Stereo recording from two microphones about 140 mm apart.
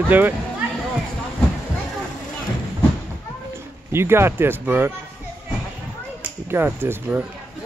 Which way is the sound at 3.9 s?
15° right (ahead or behind).